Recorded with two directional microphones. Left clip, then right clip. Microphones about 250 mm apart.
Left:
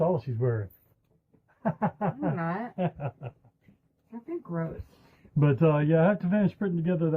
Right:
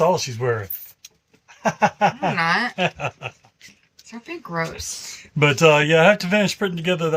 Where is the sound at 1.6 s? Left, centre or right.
Right.